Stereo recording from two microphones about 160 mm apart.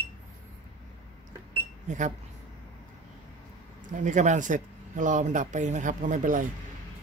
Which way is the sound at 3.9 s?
50° right (ahead or behind).